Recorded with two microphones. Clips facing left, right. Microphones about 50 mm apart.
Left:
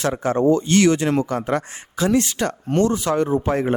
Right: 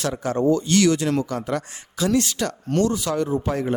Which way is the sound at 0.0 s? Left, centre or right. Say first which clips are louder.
Left 3 dB; left.